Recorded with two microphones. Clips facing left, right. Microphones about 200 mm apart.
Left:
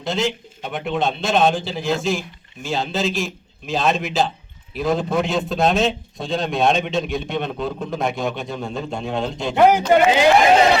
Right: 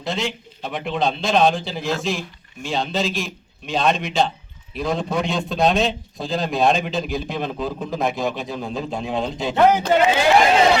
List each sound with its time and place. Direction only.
0.0 s a man's voice: centre (ahead or behind)
9.6 s speech: 15° left (ahead or behind)